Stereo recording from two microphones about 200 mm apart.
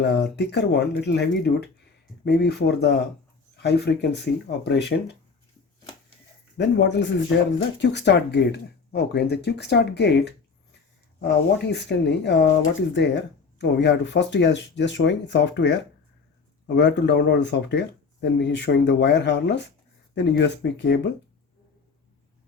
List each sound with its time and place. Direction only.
0.0 s speech: 55° left (ahead or behind)
6.6 s speech: 60° left (ahead or behind)